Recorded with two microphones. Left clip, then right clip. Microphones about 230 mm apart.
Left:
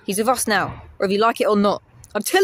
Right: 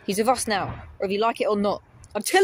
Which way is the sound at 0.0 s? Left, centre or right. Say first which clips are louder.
Left 2 dB; centre.